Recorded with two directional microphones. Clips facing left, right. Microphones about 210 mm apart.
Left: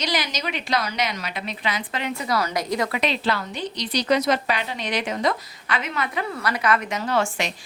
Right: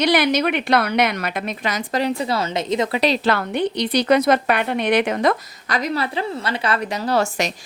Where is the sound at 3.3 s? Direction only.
60° right (ahead or behind).